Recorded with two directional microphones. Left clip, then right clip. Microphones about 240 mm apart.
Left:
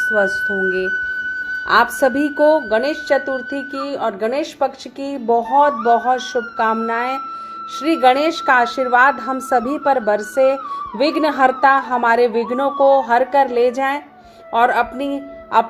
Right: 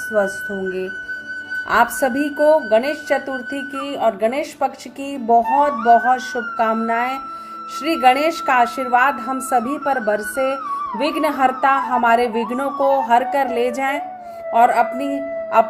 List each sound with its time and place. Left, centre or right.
0.1 s a woman's voice: centre